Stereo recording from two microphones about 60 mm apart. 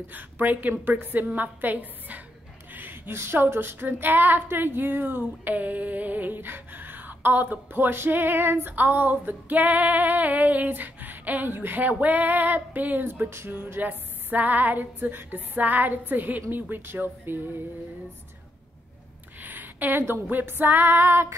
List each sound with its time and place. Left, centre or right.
0.1 s speech: right
13.7 s speech: right
19.4 s female singing: right